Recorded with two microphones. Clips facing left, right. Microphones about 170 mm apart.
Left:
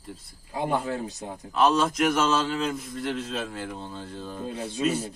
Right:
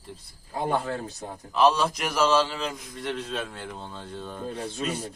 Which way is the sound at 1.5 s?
Centre (ahead or behind).